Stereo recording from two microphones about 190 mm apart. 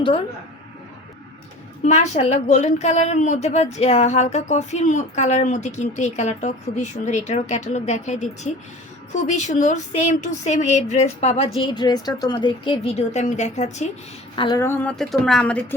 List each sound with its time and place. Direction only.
1.8 s a woman's voice: 35° left (ahead or behind)
14.3 s speech: 25° left (ahead or behind)
14.6 s speech: 10° left (ahead or behind)